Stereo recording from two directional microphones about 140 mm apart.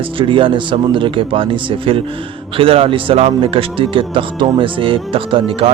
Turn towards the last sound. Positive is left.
turn(degrees=-40)  # may be behind; listen again after turning